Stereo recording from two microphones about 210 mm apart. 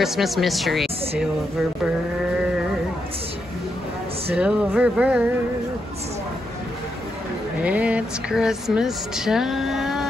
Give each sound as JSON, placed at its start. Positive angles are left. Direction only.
{"t": 0.0, "sound": "speech", "side_deg": 0}
{"t": 4.4, "sound": "speech", "side_deg": -5}
{"t": 7.6, "sound": "speech", "side_deg": -5}